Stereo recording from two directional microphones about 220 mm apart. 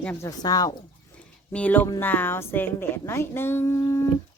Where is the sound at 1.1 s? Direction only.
5° left (ahead or behind).